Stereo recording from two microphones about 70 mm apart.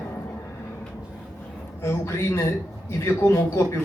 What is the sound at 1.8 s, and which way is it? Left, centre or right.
Speech, left.